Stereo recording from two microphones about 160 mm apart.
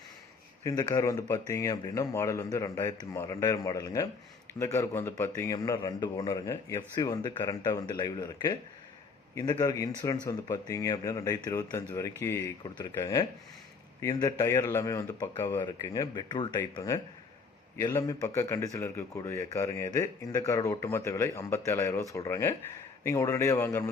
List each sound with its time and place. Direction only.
0.6 s speech: 25° left (ahead or behind)